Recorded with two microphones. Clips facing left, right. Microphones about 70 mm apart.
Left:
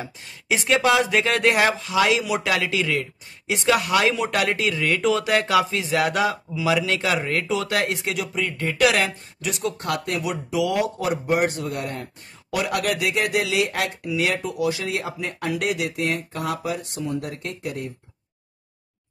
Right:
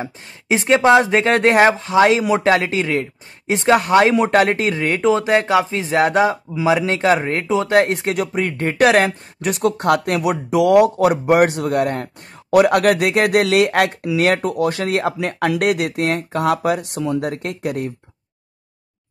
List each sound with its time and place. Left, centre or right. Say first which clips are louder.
0.0 s speech: right 6 dB; right